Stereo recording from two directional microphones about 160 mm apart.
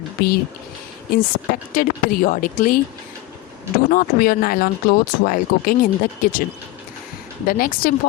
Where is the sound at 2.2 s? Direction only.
60° left (ahead or behind).